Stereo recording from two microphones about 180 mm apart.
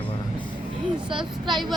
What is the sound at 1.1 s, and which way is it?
Speech, 25° right (ahead or behind).